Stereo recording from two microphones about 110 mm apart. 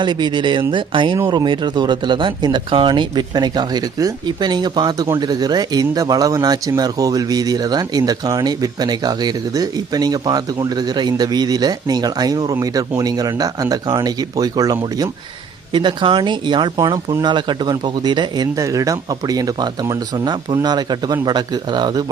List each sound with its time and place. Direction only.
0.0 s speech: 45° right (ahead or behind)
18.5 s speech: 30° right (ahead or behind)